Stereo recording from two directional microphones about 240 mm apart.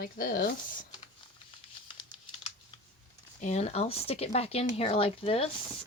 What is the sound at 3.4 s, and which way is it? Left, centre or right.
Speech, left.